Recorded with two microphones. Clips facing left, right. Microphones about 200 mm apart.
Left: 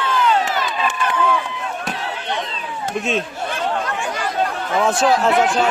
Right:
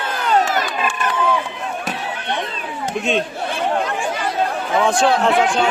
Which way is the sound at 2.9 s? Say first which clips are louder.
Right 2 dB; centre (ahead or behind).